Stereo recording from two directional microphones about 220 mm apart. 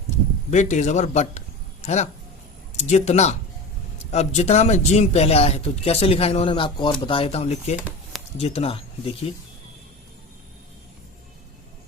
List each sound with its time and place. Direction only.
0.5 s a man's voice: 30° left (ahead or behind)